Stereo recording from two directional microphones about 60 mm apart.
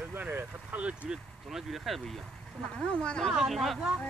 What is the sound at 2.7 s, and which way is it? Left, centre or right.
Speech, centre.